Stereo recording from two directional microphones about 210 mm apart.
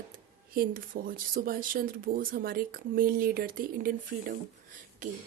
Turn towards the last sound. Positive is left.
turn(degrees=-40)  # may be behind; listen again after turning